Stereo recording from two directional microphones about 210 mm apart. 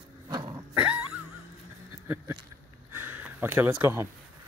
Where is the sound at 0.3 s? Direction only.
20° right (ahead or behind).